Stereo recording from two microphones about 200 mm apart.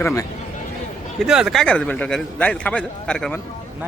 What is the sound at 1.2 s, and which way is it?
A man's voice, 5° right (ahead or behind).